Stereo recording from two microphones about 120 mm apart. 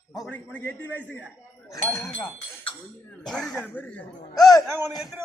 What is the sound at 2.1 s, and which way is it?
Speech, 45° left (ahead or behind).